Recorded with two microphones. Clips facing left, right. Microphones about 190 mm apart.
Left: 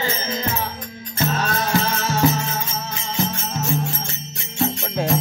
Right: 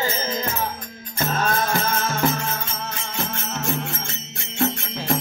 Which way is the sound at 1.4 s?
50° right (ahead or behind).